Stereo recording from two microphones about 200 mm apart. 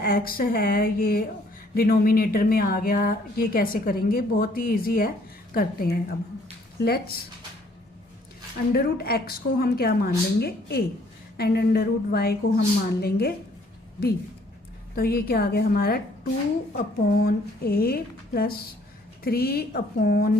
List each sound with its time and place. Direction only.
0.0 s speech: 45° left (ahead or behind)
8.7 s speech: 50° left (ahead or behind)
14.9 s speech: 50° left (ahead or behind)